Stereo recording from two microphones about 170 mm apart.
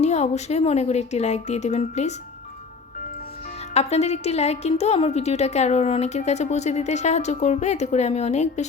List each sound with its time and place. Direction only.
0.0 s a woman's voice: 40° left (ahead or behind)
3.8 s a woman's voice: 40° left (ahead or behind)